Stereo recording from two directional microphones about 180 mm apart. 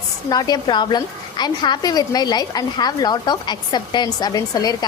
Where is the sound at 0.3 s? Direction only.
20° left (ahead or behind).